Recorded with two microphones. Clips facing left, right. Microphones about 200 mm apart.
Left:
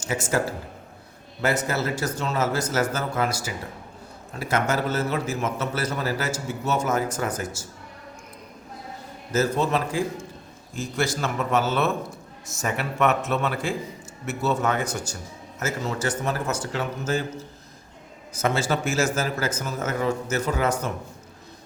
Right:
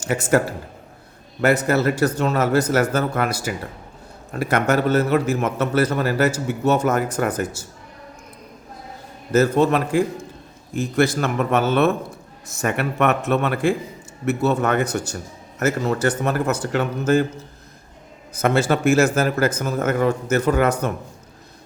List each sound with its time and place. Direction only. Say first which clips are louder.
0.0 s a man's voice: right 6 dB; 60° right (ahead or behind)
9.3 s a man's voice: right 6 dB; 60° right (ahead or behind)
18.3 s a man's voice: right 5 dB; 60° right (ahead or behind)